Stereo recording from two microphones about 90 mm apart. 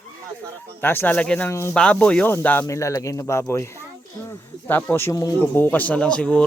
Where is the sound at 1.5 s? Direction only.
30° left (ahead or behind).